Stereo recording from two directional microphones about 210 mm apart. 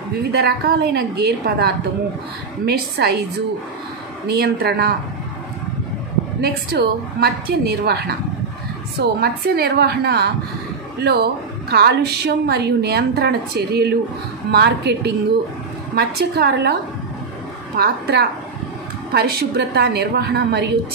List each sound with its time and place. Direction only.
0.3 s a woman's voice: 50° right (ahead or behind)
3.0 s a woman's voice: 55° right (ahead or behind)
4.4 s a woman's voice: 50° right (ahead or behind)
6.4 s a woman's voice: 50° right (ahead or behind)
9.2 s a woman's voice: 50° right (ahead or behind)
17.7 s a woman's voice: 50° right (ahead or behind)